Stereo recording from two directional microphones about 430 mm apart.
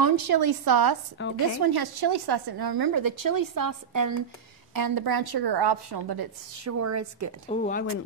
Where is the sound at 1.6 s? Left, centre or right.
Right.